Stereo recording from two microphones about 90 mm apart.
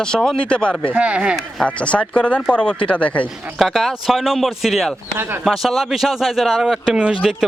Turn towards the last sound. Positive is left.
turn(degrees=-5)  # may be behind; listen again after turning